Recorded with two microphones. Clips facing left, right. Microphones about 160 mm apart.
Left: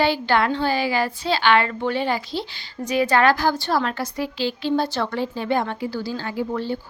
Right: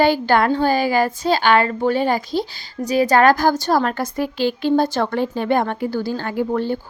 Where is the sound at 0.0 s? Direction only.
45° right (ahead or behind).